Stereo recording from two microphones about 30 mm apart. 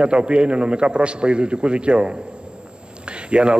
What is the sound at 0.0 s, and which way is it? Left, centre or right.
A man's voice, right.